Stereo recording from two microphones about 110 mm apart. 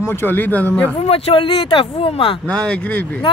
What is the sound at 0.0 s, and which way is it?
Speech, 20° left (ahead or behind).